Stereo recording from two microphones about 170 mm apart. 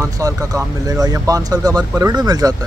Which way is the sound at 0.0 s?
20° right (ahead or behind).